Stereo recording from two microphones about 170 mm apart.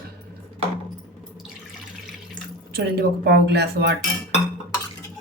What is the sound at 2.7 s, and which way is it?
Speech, 70° right (ahead or behind).